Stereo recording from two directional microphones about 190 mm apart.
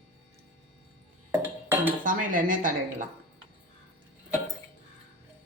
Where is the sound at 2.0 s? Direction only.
45° right (ahead or behind).